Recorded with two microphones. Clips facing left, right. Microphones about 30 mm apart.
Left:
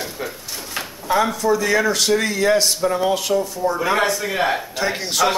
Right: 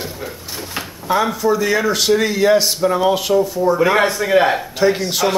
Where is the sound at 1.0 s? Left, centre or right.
Centre.